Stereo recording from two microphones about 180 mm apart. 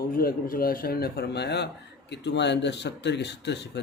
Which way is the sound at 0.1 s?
55° left (ahead or behind).